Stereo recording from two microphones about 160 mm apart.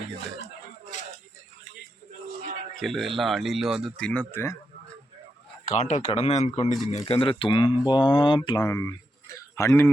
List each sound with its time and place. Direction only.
0.4 s a sound: 50° left (ahead or behind)
2.7 s speech: centre (ahead or behind)
5.6 s a man's voice: 45° left (ahead or behind)
7.0 s speech: 35° left (ahead or behind)
8.4 s speech: 20° left (ahead or behind)